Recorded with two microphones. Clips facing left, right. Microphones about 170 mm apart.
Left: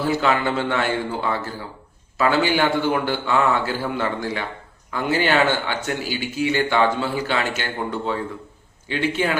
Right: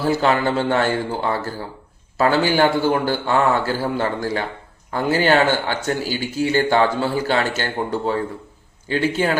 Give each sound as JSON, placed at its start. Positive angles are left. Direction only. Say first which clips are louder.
{"t": 0.0, "sound": "speech", "louder": "right 2 dB", "side_deg": -40}